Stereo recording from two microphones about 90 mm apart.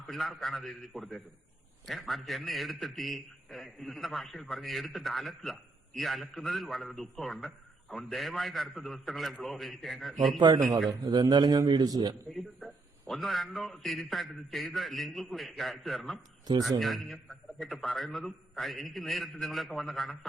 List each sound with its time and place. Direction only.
0.1 s a man's voice: centre (ahead or behind)
11.1 s a man's voice: 50° right (ahead or behind)
12.3 s a man's voice: centre (ahead or behind)
16.5 s a man's voice: 50° right (ahead or behind)
16.8 s a man's voice: centre (ahead or behind)